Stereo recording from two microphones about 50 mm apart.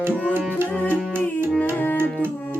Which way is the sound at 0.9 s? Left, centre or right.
Right.